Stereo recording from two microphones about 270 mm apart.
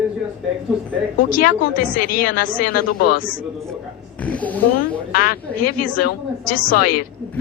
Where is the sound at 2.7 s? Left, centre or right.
Left.